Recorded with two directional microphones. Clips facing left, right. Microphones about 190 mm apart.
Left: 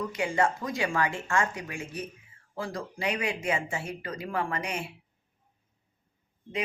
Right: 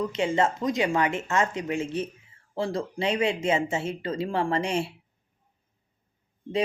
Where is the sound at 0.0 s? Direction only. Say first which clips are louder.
Right 3 dB; 25° right (ahead or behind).